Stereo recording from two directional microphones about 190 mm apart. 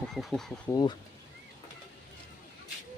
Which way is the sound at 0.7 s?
20° left (ahead or behind).